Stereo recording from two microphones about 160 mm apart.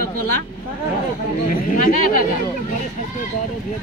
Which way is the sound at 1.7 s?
60° left (ahead or behind).